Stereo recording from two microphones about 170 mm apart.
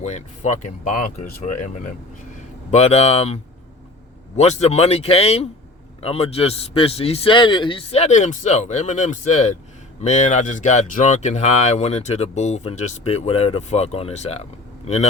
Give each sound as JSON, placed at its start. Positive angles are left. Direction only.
{"t": 0.0, "sound": "speech", "side_deg": 40}
{"t": 4.4, "sound": "speech", "side_deg": 40}